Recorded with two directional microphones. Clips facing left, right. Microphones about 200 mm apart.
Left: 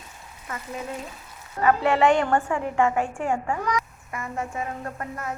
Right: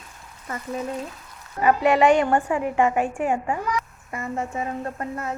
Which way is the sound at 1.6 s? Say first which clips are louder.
Right 2 dB; 15° right (ahead or behind).